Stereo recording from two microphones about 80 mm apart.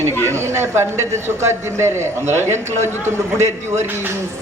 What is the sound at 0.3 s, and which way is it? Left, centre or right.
A man's voice, right.